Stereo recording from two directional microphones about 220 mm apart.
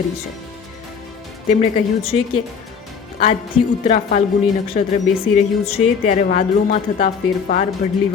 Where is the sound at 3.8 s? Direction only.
30° left (ahead or behind).